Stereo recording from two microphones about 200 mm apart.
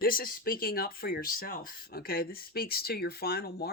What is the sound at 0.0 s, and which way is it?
Speech, 45° left (ahead or behind).